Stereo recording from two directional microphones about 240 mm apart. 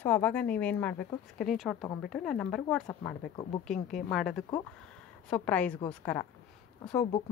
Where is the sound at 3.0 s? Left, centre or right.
Centre.